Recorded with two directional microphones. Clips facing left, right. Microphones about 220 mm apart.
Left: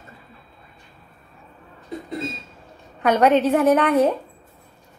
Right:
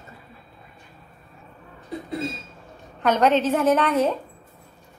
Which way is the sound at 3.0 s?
10° left (ahead or behind).